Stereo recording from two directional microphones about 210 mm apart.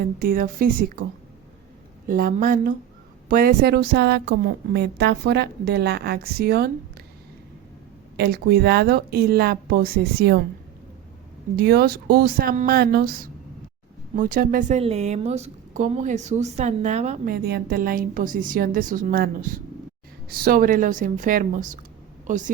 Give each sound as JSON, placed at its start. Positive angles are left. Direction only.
{"t": 0.0, "sound": "a woman's voice", "side_deg": -45}
{"t": 2.0, "sound": "a woman's voice", "side_deg": -40}
{"t": 8.1, "sound": "a woman's voice", "side_deg": -50}
{"t": 11.5, "sound": "a woman's voice", "side_deg": -50}
{"t": 14.2, "sound": "a woman's voice", "side_deg": -40}
{"t": 17.3, "sound": "a woman's voice", "side_deg": -50}